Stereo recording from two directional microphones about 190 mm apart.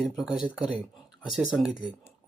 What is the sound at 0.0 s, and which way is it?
Speech, centre (ahead or behind).